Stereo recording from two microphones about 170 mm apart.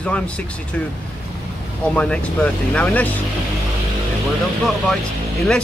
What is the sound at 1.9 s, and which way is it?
Speech, 5° left (ahead or behind).